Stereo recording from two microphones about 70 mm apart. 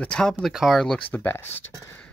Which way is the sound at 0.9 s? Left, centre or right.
Left.